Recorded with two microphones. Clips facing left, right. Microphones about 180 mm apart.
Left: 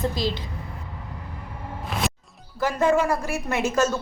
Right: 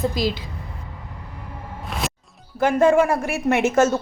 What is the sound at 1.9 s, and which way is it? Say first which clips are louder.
Music: even; centre (ahead or behind).